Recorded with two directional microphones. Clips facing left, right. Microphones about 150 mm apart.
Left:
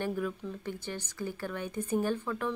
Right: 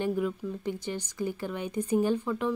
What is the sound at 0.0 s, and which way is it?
Speech, 15° right (ahead or behind).